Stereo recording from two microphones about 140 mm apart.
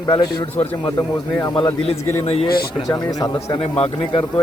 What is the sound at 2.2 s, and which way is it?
Speech, 45° left (ahead or behind).